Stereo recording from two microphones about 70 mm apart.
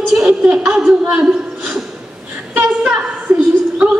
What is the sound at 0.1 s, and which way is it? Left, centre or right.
A woman's voice, centre.